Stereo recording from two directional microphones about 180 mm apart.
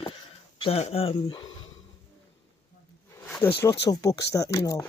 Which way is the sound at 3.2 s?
10° left (ahead or behind).